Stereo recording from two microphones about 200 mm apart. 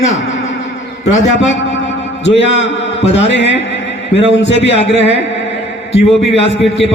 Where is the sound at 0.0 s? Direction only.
70° left (ahead or behind).